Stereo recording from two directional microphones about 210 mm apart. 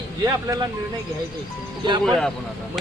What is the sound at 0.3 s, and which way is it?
Speech, 15° right (ahead or behind).